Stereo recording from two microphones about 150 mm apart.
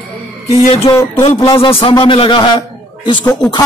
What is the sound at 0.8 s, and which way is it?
Speech, 15° left (ahead or behind).